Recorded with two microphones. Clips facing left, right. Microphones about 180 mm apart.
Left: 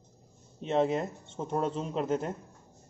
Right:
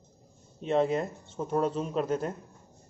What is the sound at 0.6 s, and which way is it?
Speech, 20° left (ahead or behind).